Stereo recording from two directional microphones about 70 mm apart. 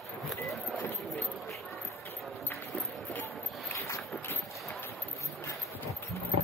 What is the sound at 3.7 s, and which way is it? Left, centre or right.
Boat, left.